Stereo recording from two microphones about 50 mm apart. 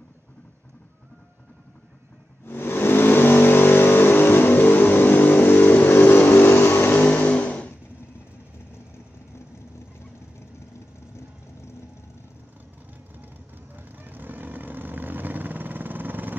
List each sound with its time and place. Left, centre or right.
2.4 s vehicle: left
13.7 s vehicle: right